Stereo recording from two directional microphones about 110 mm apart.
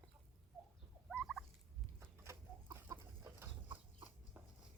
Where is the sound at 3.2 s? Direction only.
20° right (ahead or behind).